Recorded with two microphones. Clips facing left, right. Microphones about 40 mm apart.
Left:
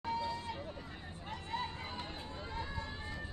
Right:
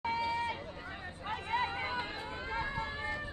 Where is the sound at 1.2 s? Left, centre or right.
Right.